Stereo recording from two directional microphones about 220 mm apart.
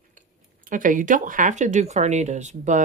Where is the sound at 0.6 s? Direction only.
35° right (ahead or behind).